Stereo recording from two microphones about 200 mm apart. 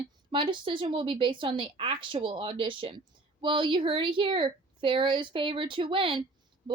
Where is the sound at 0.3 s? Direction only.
25° right (ahead or behind).